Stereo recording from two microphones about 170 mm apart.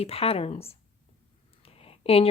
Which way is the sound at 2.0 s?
35° left (ahead or behind).